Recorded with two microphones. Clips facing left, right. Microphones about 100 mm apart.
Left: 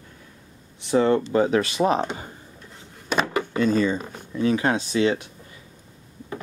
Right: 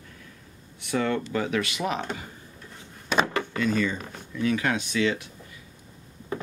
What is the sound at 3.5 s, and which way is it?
Speech, 30° left (ahead or behind).